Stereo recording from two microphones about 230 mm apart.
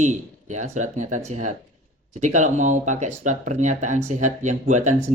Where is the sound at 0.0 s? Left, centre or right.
Right.